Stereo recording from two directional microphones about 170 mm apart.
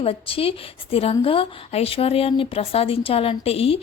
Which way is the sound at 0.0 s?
35° left (ahead or behind).